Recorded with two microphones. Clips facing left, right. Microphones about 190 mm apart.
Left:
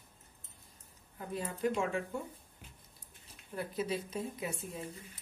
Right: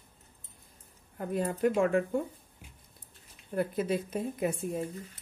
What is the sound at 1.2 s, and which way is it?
Speech, 55° right (ahead or behind).